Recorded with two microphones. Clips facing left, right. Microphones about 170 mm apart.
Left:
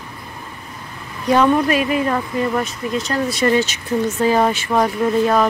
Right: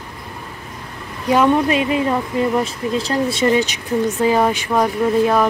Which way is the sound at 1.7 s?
25° right (ahead or behind).